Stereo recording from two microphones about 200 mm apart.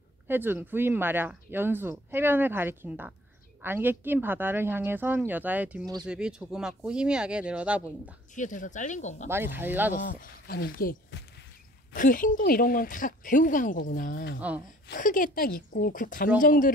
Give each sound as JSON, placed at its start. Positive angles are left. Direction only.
{"t": 0.3, "sound": "speech", "side_deg": -10}
{"t": 8.4, "sound": "speech", "side_deg": 40}
{"t": 9.3, "sound": "speech", "side_deg": -10}
{"t": 9.9, "sound": "speech", "side_deg": 45}